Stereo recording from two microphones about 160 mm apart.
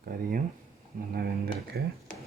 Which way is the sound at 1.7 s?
90° right.